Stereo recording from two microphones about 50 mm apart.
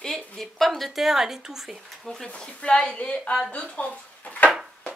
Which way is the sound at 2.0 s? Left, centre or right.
Centre.